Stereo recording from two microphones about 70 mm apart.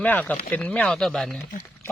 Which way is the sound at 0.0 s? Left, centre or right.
Left.